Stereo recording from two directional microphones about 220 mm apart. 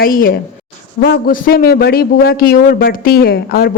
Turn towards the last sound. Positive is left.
turn(degrees=45)  # may be behind; listen again after turning